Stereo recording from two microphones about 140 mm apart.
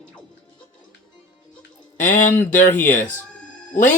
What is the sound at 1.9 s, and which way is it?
Speech, 65° left (ahead or behind).